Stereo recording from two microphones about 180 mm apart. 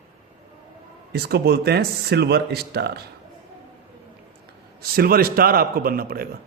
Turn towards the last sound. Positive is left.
turn(degrees=-55)  # may be behind; listen again after turning